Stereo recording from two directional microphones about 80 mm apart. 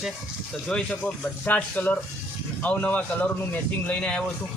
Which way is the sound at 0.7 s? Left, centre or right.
Centre.